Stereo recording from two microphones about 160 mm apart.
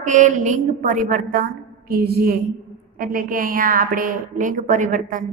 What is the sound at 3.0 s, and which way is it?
A woman's voice, 60° right (ahead or behind).